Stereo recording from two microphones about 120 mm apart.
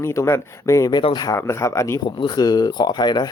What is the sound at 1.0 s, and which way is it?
Speech, 45° left (ahead or behind).